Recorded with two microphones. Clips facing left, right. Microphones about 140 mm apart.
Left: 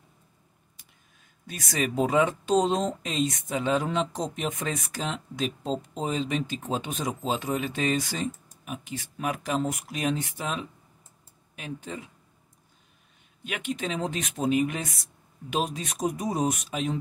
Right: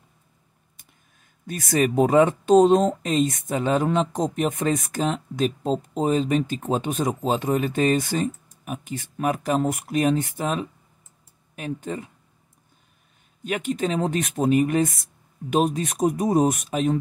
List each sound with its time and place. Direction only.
1.5 s speech: 50° right (ahead or behind)
13.4 s speech: 45° right (ahead or behind)